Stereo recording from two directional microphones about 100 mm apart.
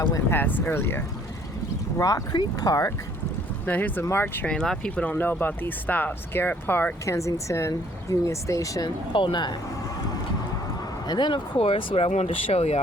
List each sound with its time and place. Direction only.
0.3 s speech: 20° left (ahead or behind)
2.0 s speech: 35° left (ahead or behind)
3.7 s speech: 15° left (ahead or behind)
4.4 s speech: 5° left (ahead or behind)
7.0 s speech: 30° left (ahead or behind)
9.1 s speech: 55° left (ahead or behind)
11.1 s speech: 50° left (ahead or behind); by 12.8 s 90° left